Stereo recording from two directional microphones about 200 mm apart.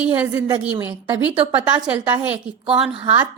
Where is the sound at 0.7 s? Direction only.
25° right (ahead or behind).